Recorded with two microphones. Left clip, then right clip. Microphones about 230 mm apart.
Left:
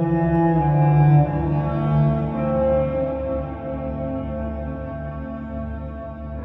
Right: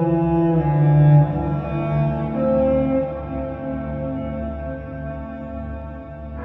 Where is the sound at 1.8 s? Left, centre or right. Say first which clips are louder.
Right 2 dB; centre.